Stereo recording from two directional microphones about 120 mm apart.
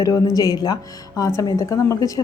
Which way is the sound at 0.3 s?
35° left (ahead or behind).